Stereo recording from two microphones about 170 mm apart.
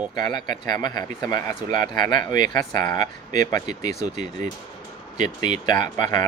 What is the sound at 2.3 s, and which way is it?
Speech, 50° right (ahead or behind).